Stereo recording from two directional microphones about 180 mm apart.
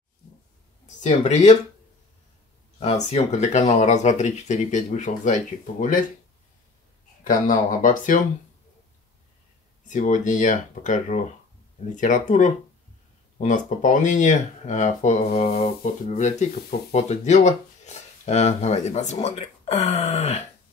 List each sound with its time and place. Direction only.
1.0 s speech: 40° left (ahead or behind)
2.8 s speech: 40° left (ahead or behind)
7.2 s speech: 45° left (ahead or behind)
9.8 s speech: 45° left (ahead or behind)